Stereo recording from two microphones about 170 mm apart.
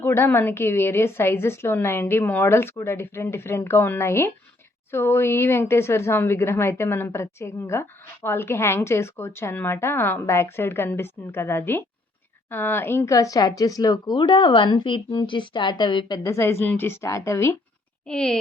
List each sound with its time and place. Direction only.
0.0 s speech: 15° left (ahead or behind)
18.0 s speech: 5° left (ahead or behind)